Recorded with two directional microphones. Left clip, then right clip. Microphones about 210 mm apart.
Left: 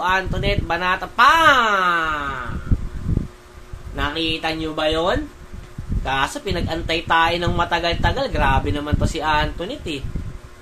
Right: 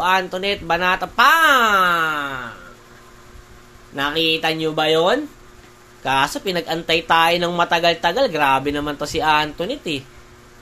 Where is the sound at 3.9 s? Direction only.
30° right (ahead or behind).